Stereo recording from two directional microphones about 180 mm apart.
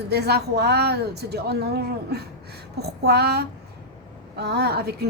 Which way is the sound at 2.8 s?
65° right (ahead or behind).